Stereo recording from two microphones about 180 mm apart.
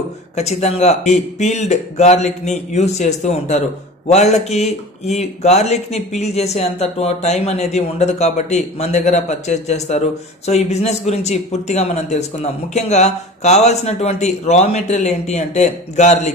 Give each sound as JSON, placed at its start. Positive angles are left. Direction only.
{"t": 0.4, "sound": "speech", "side_deg": 35}